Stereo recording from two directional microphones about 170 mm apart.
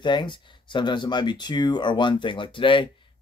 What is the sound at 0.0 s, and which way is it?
Speech, 25° left (ahead or behind).